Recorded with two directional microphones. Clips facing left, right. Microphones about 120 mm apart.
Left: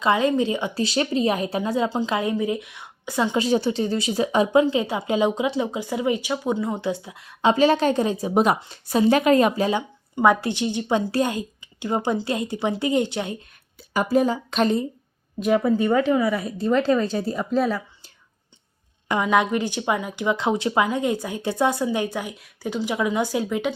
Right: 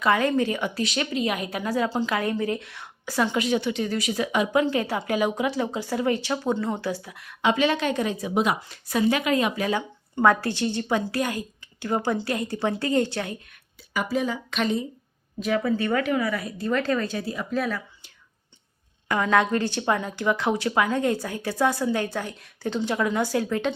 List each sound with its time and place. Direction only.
0.0 s a woman's voice: 20° left (ahead or behind)
4.6 s a woman's voice: 20° left (ahead or behind); by 9.5 s 40° left (ahead or behind)
9.6 s a woman's voice: 25° left (ahead or behind)
13.7 s a woman's voice: 40° left (ahead or behind)
15.4 s speech: 10° left (ahead or behind)
15.9 s a woman's voice: 20° left (ahead or behind)